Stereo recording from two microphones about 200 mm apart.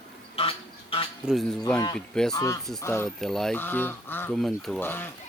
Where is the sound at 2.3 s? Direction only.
15° left (ahead or behind).